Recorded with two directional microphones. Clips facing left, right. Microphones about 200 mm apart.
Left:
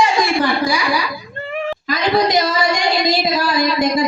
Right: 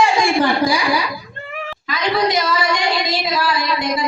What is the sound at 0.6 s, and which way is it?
Speech, 55° right (ahead or behind).